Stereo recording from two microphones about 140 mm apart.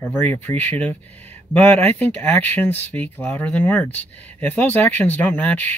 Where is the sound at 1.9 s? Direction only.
10° left (ahead or behind).